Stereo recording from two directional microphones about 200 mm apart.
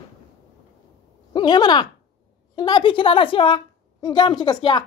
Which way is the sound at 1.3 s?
20° left (ahead or behind).